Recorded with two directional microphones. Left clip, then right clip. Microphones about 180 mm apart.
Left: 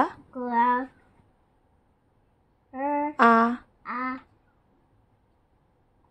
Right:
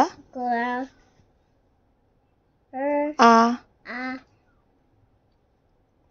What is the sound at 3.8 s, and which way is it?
Duck, 15° left (ahead or behind).